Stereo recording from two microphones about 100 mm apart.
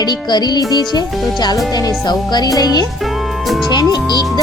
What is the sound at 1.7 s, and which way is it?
Speech, 40° left (ahead or behind).